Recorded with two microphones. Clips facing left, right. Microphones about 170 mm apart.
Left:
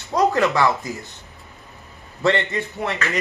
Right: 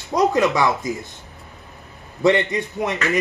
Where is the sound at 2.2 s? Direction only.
15° right (ahead or behind).